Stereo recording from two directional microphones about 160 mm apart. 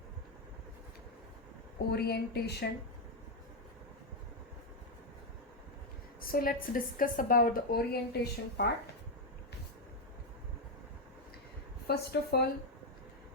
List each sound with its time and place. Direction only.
1.9 s speech: 80° left
6.2 s a woman's voice: 65° left (ahead or behind); by 8.6 s 80° left
11.9 s speech: 90° left